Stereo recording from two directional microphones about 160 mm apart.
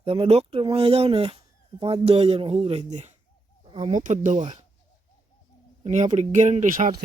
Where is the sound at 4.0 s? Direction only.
50° right (ahead or behind).